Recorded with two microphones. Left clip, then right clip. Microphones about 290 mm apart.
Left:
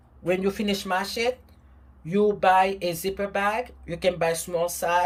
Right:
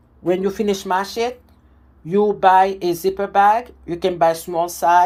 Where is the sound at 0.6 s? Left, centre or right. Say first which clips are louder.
Right 7 dB; centre.